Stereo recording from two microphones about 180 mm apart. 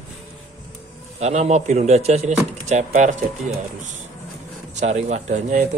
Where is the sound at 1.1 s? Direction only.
35° right (ahead or behind).